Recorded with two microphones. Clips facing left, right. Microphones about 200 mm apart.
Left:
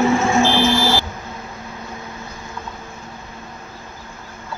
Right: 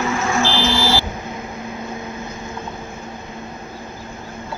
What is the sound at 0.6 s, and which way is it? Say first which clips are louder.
Vehicle: left 2 dB; 50° left (ahead or behind).